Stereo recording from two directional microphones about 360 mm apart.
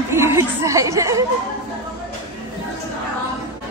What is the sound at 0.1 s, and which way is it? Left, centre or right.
Speech, centre.